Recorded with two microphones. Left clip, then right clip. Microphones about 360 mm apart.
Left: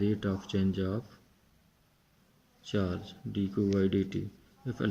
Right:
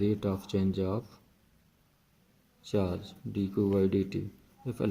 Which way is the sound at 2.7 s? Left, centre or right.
Right.